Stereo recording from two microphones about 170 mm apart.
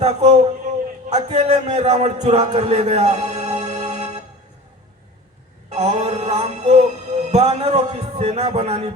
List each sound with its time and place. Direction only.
0.0 s a man's voice: 40° right (ahead or behind)
3.7 s music: 20° right (ahead or behind)
5.7 s music: 40° right (ahead or behind)